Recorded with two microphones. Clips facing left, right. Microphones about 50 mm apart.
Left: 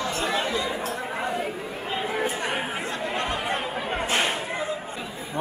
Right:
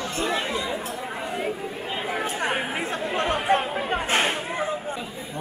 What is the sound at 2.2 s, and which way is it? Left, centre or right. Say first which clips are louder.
Chatter: right 1 dB; right.